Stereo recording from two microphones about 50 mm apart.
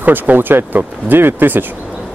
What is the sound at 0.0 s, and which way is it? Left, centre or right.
Speech, right.